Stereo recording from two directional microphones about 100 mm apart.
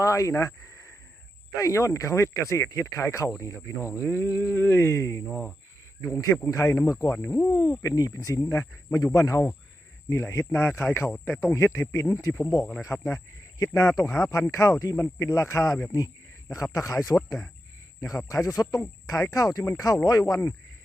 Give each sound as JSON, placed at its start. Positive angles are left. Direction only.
{"t": 0.0, "sound": "speech", "side_deg": 30}
{"t": 7.5, "sound": "speech", "side_deg": 40}
{"t": 16.7, "sound": "speech", "side_deg": 35}